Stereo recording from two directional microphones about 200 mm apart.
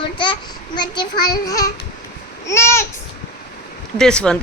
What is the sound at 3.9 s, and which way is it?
Speech, 5° left (ahead or behind).